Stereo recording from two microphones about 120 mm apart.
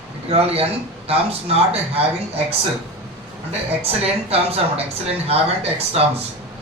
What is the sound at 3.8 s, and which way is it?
Speech, 55° right (ahead or behind).